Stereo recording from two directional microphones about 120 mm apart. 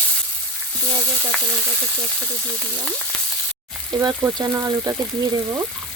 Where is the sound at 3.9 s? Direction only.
35° right (ahead or behind).